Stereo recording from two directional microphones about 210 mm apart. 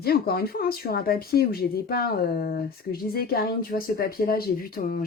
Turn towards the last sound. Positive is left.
turn(degrees=45)  # may be behind; listen again after turning